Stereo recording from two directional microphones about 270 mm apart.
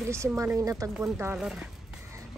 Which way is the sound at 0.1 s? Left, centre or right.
Centre.